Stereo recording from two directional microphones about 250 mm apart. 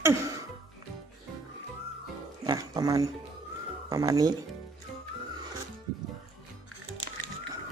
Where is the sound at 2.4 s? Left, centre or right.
Centre.